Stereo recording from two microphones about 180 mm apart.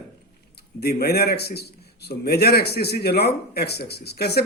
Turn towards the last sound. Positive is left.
turn(degrees=65)  # may be behind; listen again after turning